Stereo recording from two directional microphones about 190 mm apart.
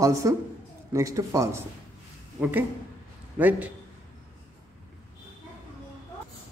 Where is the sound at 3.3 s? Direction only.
10° right (ahead or behind).